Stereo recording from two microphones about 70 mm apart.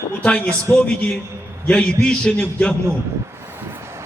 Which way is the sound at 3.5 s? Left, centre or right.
Right.